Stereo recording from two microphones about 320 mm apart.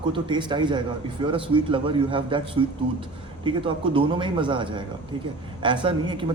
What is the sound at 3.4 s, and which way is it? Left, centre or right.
A man's voice, centre.